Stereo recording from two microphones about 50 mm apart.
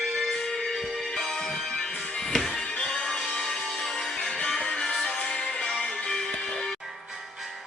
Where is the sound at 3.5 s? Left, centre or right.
Centre.